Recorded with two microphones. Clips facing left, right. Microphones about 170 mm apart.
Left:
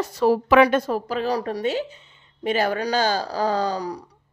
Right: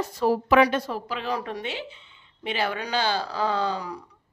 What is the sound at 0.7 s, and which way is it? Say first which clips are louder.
Speech: left 6 dB; 45° left (ahead or behind).